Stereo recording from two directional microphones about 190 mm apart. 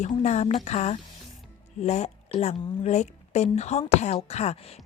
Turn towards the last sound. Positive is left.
turn(degrees=35)  # may be behind; listen again after turning